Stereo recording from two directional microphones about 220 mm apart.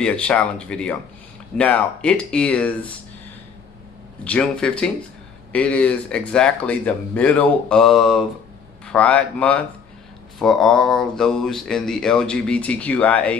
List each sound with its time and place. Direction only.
0.0 s speech: 5° left (ahead or behind)
4.2 s speech: 5° left (ahead or behind)